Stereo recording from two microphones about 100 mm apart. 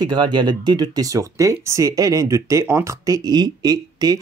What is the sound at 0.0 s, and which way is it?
Speech, 50° right (ahead or behind).